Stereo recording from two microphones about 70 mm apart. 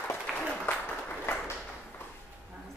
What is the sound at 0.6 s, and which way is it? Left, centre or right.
Applause, left.